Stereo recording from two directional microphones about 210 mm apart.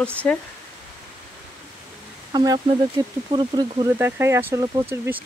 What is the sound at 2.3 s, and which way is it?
Speech, 20° right (ahead or behind).